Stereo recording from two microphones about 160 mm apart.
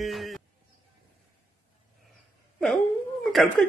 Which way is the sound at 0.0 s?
Centre (ahead or behind).